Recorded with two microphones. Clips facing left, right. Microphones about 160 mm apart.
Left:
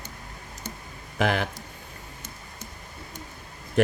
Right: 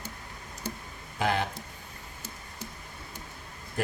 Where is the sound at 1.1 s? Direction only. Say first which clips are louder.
Left 3 dB; 90° left.